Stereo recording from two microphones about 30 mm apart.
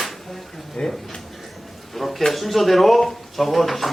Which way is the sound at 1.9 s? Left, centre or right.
Centre.